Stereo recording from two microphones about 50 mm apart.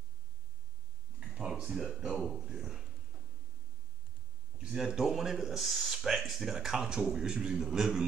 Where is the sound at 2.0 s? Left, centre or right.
Centre.